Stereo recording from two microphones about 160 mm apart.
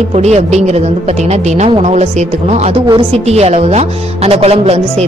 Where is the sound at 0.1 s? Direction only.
45° right (ahead or behind).